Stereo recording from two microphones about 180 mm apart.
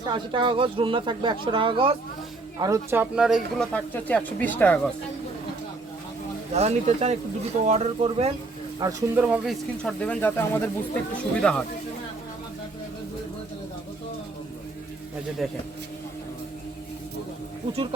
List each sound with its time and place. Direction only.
0.0 s speech: 25° right (ahead or behind)
2.6 s speech: 20° right (ahead or behind); by 4.9 s 10° left (ahead or behind)
6.5 s speech: 40° right (ahead or behind)
8.8 s speech: 20° right (ahead or behind); by 11.6 s 5° left (ahead or behind)
15.4 s speech: centre (ahead or behind)